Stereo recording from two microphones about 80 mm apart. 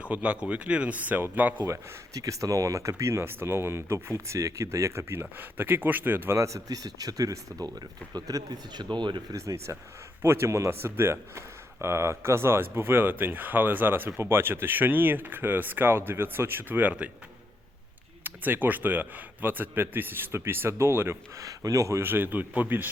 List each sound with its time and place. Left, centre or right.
0.0 s a man's voice: centre
1.6 s a man's voice: right
6.7 s speech: right
9.3 s a man's voice: right
18.2 s a man's voice: right
21.4 s a man's voice: right